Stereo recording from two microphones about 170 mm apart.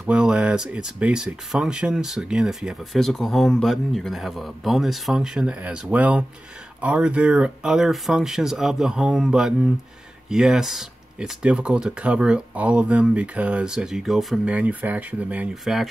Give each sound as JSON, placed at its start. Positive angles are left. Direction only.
{"t": 0.0, "sound": "speech", "side_deg": -5}